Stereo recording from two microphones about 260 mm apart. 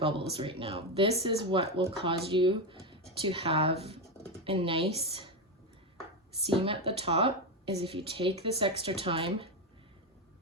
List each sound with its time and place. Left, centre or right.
0.0 s speech: right
6.4 s speech: right